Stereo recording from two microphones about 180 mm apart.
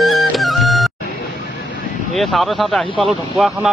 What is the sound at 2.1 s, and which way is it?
Speech, centre (ahead or behind).